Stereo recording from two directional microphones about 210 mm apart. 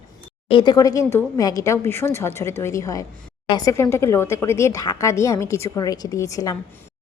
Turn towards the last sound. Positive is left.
turn(degrees=15)  # may be behind; listen again after turning